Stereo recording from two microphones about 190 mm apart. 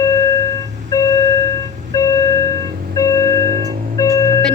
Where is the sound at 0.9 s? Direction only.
20° left (ahead or behind).